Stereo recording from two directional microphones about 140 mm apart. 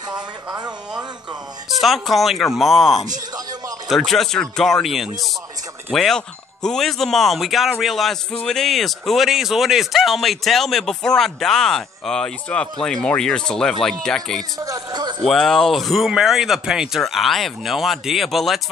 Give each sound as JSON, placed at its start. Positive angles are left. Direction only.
{"t": 0.1, "sound": "speech", "side_deg": -30}
{"t": 1.8, "sound": "speech", "side_deg": 0}
{"t": 14.6, "sound": "a sound", "side_deg": -25}
{"t": 15.2, "sound": "speech", "side_deg": 0}